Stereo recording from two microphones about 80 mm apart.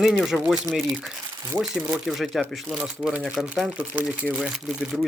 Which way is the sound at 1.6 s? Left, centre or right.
Centre.